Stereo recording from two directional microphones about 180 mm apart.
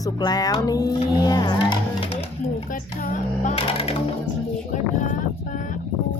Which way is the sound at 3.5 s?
35° left (ahead or behind).